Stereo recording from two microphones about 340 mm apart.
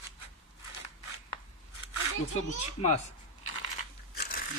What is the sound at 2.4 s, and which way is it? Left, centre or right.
Speech, centre.